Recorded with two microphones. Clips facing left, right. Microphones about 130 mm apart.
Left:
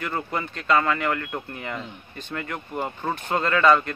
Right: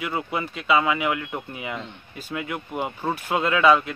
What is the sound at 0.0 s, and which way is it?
Speech, 5° right (ahead or behind).